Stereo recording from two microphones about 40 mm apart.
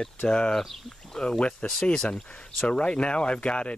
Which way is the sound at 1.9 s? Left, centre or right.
Centre.